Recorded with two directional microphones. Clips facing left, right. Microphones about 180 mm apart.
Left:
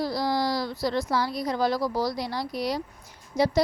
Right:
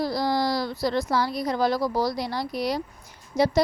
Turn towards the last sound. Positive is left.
turn(degrees=-55)  # may be behind; listen again after turning